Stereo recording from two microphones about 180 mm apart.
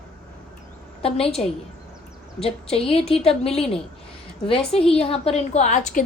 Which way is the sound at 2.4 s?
35° left (ahead or behind).